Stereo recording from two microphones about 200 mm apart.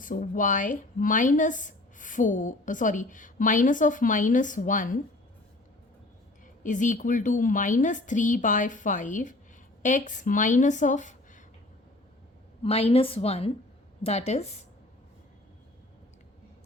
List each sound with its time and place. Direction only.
0.0 s a woman's voice: 40° left (ahead or behind)
6.6 s a woman's voice: 40° left (ahead or behind)
12.6 s a woman's voice: 30° left (ahead or behind)